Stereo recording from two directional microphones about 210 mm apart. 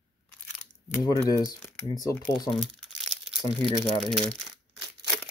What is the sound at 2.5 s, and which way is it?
Crumpling, centre (ahead or behind).